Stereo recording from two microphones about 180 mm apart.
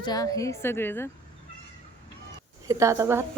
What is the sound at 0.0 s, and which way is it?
A woman's voice, 20° left (ahead or behind).